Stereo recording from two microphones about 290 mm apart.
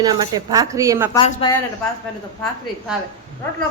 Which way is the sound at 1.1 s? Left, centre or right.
Centre.